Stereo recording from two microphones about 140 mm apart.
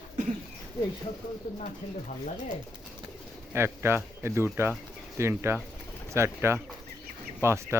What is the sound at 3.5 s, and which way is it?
Speech, 15° right (ahead or behind).